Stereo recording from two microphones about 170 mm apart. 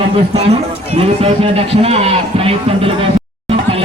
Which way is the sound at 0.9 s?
35° right (ahead or behind).